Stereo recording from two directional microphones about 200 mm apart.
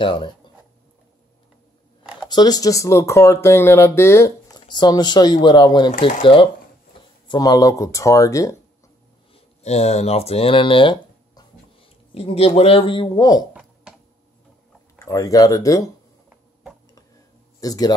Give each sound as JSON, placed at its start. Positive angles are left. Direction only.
{"t": 0.0, "sound": "speech", "side_deg": 25}
{"t": 2.2, "sound": "speech", "side_deg": 20}
{"t": 9.3, "sound": "speech", "side_deg": 35}
{"t": 13.5, "sound": "a sound", "side_deg": -5}
{"t": 15.0, "sound": "speech", "side_deg": 15}
{"t": 17.6, "sound": "speech", "side_deg": 20}